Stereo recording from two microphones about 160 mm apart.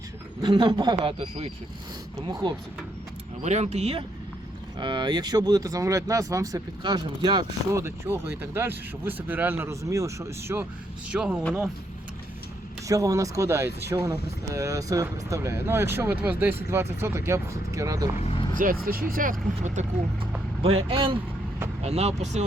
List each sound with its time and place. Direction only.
0.4 s speech: 30° right (ahead or behind)
2.1 s speech: 25° right (ahead or behind)
3.4 s speech: 45° right (ahead or behind)
4.8 s speech: 30° right (ahead or behind); by 11.3 s 5° right (ahead or behind)
12.9 s speech: 20° right (ahead or behind)
18.2 s speech: 40° left (ahead or behind)
18.5 s speech: 60° right (ahead or behind)
20.6 s speech: 35° right (ahead or behind)